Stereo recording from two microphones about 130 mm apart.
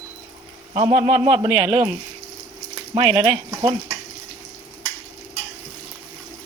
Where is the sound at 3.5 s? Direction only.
30° right (ahead or behind).